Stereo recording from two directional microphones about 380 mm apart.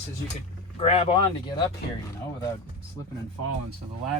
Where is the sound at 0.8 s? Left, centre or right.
Centre.